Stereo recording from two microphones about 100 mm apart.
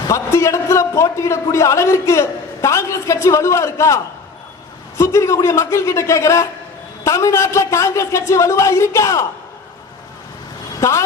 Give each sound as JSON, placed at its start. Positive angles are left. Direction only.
{"t": 0.1, "sound": "a man's voice", "side_deg": 30}
{"t": 10.8, "sound": "speech", "side_deg": 30}